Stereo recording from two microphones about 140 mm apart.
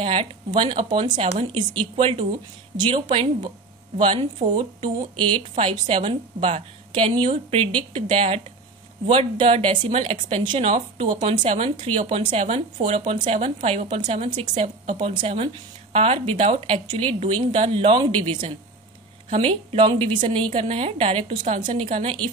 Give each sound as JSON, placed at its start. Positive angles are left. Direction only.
{"t": 0.0, "sound": "a woman's voice", "side_deg": -40}
{"t": 11.4, "sound": "a woman's voice", "side_deg": -50}